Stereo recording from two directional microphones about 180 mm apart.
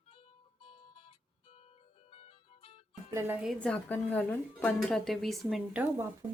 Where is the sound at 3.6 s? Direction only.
5° left (ahead or behind).